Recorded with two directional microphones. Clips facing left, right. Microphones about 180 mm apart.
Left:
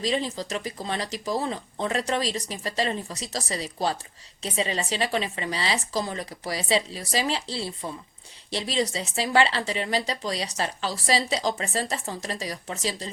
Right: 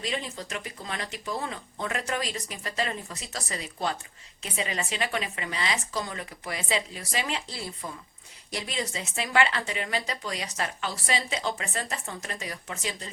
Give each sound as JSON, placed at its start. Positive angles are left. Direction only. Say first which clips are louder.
{"t": 0.0, "sound": "speech", "louder": "left 6 dB", "side_deg": 35}